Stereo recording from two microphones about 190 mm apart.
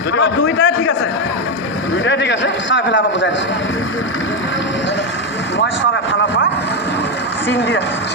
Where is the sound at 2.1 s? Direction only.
70° left (ahead or behind).